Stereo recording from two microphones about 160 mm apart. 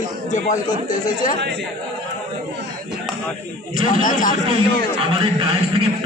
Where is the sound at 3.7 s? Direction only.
55° left (ahead or behind).